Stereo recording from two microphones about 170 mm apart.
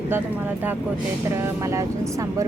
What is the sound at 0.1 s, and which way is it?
Speech, 10° right (ahead or behind).